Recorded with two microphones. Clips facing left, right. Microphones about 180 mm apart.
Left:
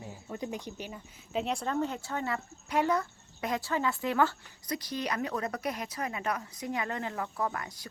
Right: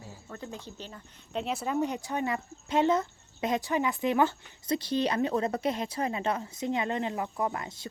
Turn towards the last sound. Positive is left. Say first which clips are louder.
# right 2 dB
turn(degrees=-25)  # may be behind; listen again after turning